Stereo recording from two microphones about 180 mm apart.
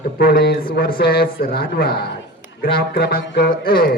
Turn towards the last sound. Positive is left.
turn(degrees=55)  # may be behind; listen again after turning